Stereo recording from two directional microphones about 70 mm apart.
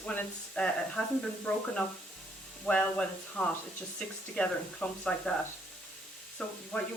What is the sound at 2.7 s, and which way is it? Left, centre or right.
Speech, centre.